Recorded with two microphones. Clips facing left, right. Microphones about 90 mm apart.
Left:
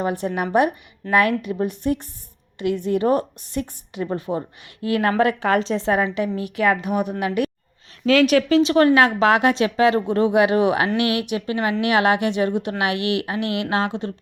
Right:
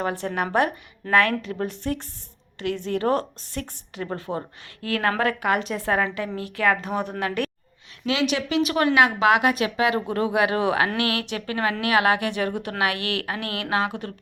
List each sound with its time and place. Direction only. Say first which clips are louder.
0.1 s a woman's voice: left 3 dB; 15° left (ahead or behind)
5.5 s a woman's voice: left 4 dB; 30° left (ahead or behind); by 7.5 s 15° left (ahead or behind)
8.0 s a woman's voice: left 8 dB; 45° left (ahead or behind); by 14.1 s 25° left (ahead or behind)